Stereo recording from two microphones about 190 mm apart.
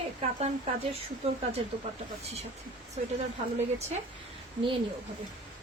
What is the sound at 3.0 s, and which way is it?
Speech, 35° right (ahead or behind).